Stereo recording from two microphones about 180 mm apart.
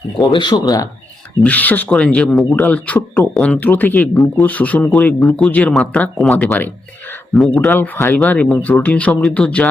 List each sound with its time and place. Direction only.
0.2 s speech: 25° left (ahead or behind); by 7.7 s centre (ahead or behind)
7.7 s speech: 10° left (ahead or behind)